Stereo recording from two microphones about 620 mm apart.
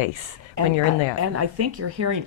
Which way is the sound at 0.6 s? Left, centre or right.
Right.